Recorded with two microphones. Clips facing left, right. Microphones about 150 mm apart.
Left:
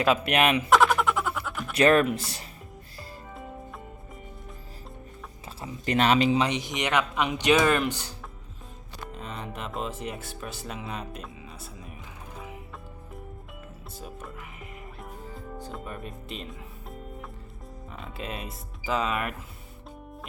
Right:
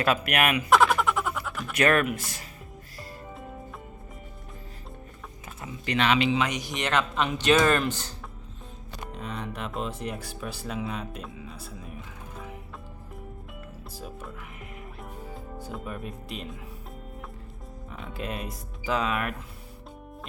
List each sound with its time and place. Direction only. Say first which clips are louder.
0.3 s speech: left 2 dB; 25° left (ahead or behind)
0.7 s a sound: right 3 dB; centre (ahead or behind)
1.7 s speech: left 3 dB; 30° left (ahead or behind)
5.5 s speech: left 3 dB; 30° left (ahead or behind)
5.9 s speech: left 2 dB; 40° left (ahead or behind)
6.5 s speech: left 1 dB; 20° left (ahead or behind)
9.1 s music: right 2 dB; centre (ahead or behind)
13.9 s speech: even; centre (ahead or behind)
15.5 s music: right 2 dB; 5° right (ahead or behind)
17.9 s speech: right 2 dB; centre (ahead or behind)